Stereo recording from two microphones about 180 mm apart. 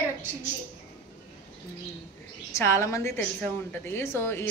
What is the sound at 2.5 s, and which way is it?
A woman's voice, 15° left (ahead or behind).